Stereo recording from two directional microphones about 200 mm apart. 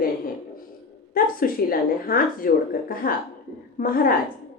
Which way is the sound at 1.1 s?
45° left (ahead or behind).